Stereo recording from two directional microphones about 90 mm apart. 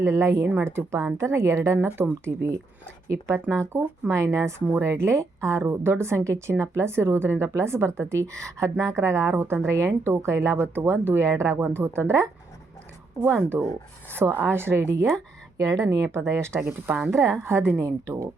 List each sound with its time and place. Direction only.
0.0 s a woman's voice: 30° right (ahead or behind)